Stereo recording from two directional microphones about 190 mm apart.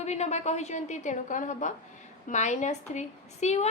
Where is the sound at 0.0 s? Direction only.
35° left (ahead or behind).